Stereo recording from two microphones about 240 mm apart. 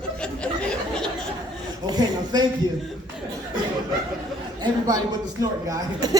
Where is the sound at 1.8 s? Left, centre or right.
Centre.